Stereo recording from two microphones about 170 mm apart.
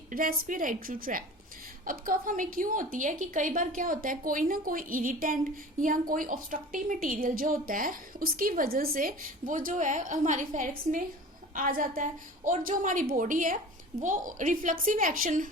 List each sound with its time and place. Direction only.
0.1 s a woman's voice: 55° right (ahead or behind)